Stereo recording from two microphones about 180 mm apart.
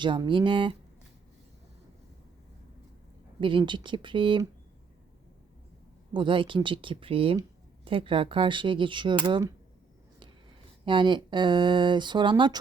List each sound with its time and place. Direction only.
0.0 s speech: 25° right (ahead or behind)
3.4 s speech: 25° right (ahead or behind)
6.1 s speech: 30° right (ahead or behind)
10.8 s speech: 25° right (ahead or behind)